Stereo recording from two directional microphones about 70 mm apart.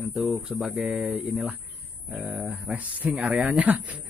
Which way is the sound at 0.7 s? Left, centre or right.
Right.